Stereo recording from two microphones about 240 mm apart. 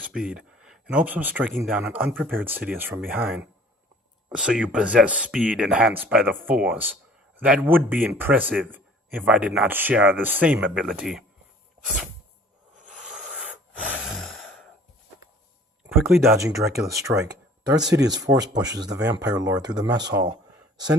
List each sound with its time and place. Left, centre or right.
0.0 s speech: centre
13.8 s gasp: centre
15.9 s speech: centre